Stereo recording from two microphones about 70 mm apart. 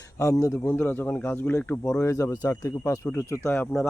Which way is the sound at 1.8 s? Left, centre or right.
Left.